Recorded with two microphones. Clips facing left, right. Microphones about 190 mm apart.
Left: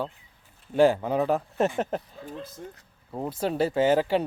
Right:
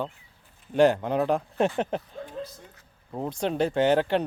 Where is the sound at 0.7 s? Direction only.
5° left (ahead or behind).